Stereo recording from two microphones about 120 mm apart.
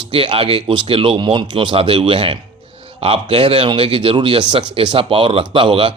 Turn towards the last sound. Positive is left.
turn(degrees=-45)  # may be behind; listen again after turning